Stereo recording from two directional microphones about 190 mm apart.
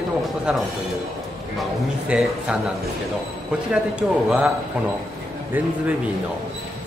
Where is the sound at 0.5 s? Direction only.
5° right (ahead or behind).